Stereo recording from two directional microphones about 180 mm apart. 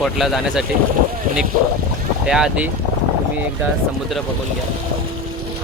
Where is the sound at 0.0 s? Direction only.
Centre (ahead or behind).